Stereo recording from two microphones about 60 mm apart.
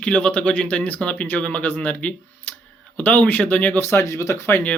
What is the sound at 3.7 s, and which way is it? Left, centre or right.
Speech, left.